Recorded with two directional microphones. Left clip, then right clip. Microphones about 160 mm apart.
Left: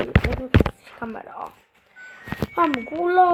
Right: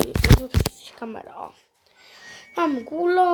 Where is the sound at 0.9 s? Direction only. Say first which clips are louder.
Left 2 dB; 20° right (ahead or behind).